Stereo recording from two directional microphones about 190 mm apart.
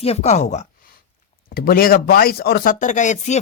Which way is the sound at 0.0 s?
35° left (ahead or behind).